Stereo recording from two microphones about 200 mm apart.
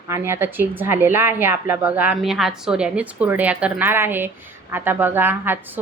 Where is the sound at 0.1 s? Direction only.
10° right (ahead or behind).